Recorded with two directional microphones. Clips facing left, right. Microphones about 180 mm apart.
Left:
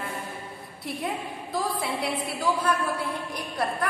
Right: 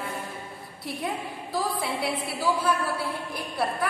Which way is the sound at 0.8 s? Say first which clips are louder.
Even; centre (ahead or behind).